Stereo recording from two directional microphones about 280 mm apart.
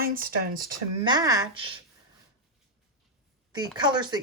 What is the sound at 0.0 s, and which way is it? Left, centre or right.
Speech, right.